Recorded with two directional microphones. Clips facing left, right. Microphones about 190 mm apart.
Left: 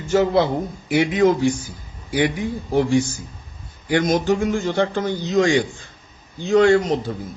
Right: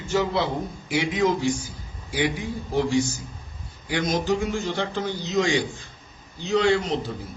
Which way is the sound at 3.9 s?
50° left (ahead or behind).